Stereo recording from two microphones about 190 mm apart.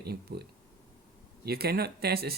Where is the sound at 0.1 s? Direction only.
55° right (ahead or behind).